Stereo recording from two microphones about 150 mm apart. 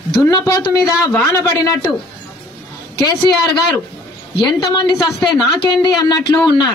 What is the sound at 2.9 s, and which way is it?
A man's voice, 25° left (ahead or behind).